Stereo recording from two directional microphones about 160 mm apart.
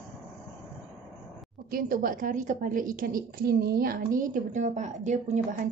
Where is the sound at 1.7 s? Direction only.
60° right (ahead or behind).